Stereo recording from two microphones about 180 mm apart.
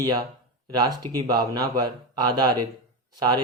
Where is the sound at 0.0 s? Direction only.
20° right (ahead or behind).